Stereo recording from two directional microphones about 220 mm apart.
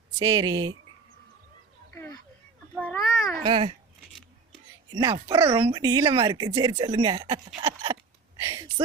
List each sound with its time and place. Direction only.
0.2 s speech: 20° right (ahead or behind)
2.7 s babbling: 5° left (ahead or behind)
3.4 s speech: 25° right (ahead or behind)
4.9 s speech: 20° right (ahead or behind)